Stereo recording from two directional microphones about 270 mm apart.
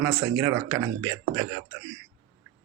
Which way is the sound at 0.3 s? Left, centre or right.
Centre.